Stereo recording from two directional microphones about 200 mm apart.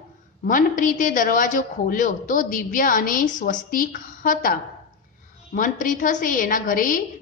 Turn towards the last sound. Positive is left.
turn(degrees=45)  # may be behind; listen again after turning